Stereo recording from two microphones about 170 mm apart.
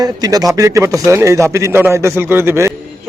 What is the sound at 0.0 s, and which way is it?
A man's voice, 20° right (ahead or behind).